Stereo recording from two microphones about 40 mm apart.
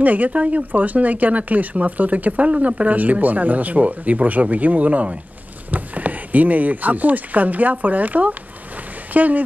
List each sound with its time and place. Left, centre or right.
0.0 s speech: right